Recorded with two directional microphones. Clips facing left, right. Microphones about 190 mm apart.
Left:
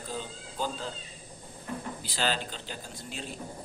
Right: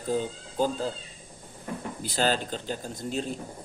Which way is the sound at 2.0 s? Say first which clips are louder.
Right 6 dB; 45° right (ahead or behind).